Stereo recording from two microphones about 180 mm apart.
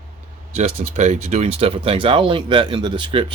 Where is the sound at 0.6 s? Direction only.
35° right (ahead or behind).